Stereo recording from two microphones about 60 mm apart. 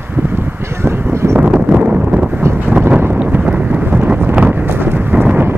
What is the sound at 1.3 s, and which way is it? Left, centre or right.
Wind noise, centre.